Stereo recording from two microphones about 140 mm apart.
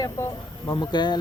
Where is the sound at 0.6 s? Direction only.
30° left (ahead or behind).